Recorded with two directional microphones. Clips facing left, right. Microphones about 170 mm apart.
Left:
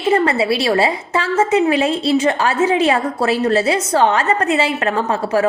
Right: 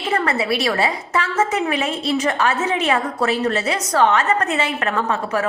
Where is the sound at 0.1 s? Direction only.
30° left (ahead or behind).